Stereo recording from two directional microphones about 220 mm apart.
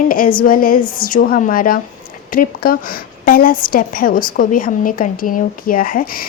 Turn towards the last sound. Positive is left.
turn(degrees=40)  # may be behind; listen again after turning